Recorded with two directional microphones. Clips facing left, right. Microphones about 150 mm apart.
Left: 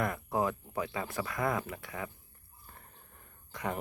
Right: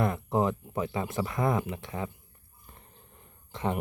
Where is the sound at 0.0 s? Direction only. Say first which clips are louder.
Right 4 dB; 25° right (ahead or behind).